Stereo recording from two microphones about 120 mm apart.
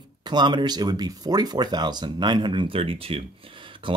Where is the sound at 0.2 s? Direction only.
35° right (ahead or behind).